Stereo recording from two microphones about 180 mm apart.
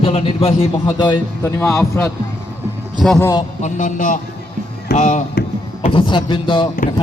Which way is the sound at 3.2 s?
15° left (ahead or behind).